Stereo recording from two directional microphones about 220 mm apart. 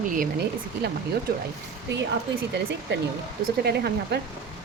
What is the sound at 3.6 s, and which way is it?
Speech, 45° right (ahead or behind).